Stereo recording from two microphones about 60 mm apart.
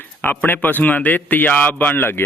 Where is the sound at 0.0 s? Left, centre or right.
Left.